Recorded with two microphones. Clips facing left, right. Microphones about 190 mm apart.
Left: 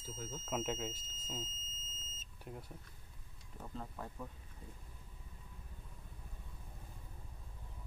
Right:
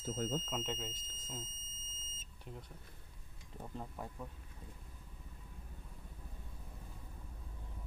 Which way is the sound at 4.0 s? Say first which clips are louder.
Right 1 dB; 15° right (ahead or behind).